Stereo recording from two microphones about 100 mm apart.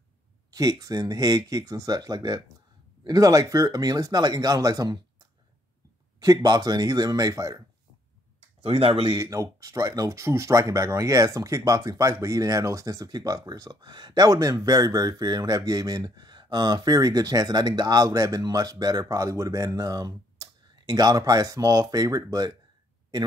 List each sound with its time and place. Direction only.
0.5 s speech: 40° right (ahead or behind)
6.1 s speech: 40° right (ahead or behind)
8.6 s speech: 75° right (ahead or behind)
9.2 s speech: 30° right (ahead or behind)